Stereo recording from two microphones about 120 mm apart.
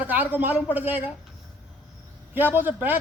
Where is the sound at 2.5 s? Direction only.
15° right (ahead or behind).